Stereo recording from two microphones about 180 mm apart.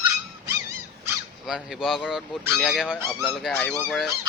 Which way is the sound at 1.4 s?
5° right (ahead or behind).